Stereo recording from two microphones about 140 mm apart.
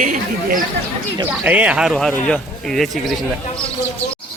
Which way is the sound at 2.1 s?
5° left (ahead or behind).